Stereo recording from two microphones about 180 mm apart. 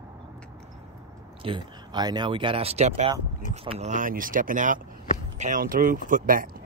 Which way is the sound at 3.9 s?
50° right (ahead or behind).